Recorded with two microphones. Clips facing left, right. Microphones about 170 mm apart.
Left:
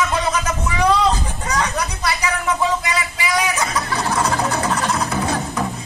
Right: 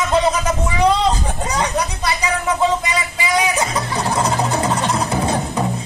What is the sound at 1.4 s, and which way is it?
Chatter, 20° right (ahead or behind).